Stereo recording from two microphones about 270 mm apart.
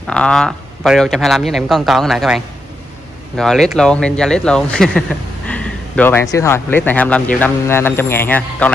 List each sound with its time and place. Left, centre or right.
0.0 s speech: centre